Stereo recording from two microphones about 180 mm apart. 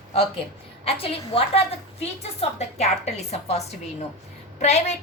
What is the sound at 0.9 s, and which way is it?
A woman's voice, 30° left (ahead or behind).